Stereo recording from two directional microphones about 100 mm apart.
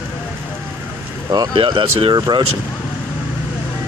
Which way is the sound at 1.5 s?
60° right (ahead or behind).